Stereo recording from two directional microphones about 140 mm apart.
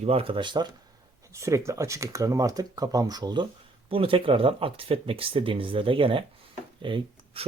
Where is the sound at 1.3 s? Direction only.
20° right (ahead or behind).